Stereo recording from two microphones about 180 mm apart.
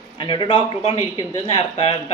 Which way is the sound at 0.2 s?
25° left (ahead or behind).